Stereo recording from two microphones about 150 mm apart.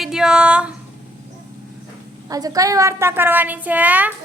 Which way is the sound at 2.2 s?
25° right (ahead or behind).